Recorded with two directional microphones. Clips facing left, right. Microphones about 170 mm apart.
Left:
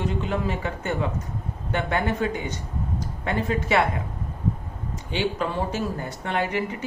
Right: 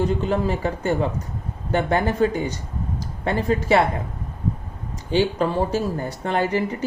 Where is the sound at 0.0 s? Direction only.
35° right (ahead or behind).